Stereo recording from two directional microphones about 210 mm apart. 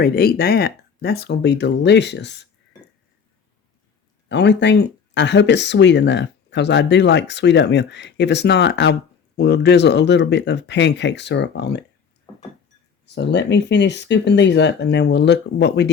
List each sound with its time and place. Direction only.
0.0 s speech: 45° left (ahead or behind)
4.3 s speech: 55° left (ahead or behind)
13.1 s speech: 55° left (ahead or behind)